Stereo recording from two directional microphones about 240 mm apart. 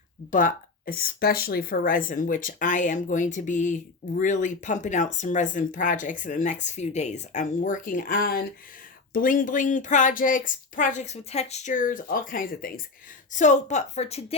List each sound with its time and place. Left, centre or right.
0.3 s a woman's voice: left